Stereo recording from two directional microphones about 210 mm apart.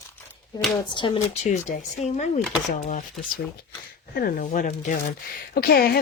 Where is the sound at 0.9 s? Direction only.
25° left (ahead or behind).